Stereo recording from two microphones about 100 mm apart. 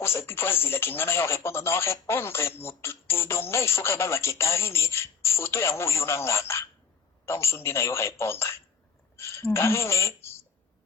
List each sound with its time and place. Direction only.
0.0 s speech: 25° left (ahead or behind)